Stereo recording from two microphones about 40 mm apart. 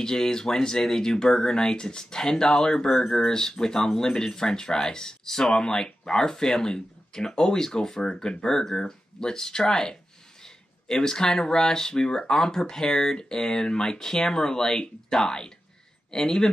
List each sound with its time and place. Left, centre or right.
0.0 s speech: centre